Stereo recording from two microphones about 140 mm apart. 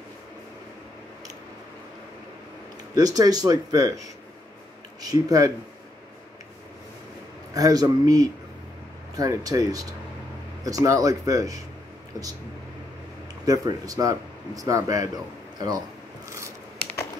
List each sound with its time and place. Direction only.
2.9 s speech: 25° right (ahead or behind)
5.0 s speech: 25° right (ahead or behind)
7.5 s speech: 25° right (ahead or behind)
13.5 s speech: 25° right (ahead or behind)
16.3 s scissors: 20° right (ahead or behind)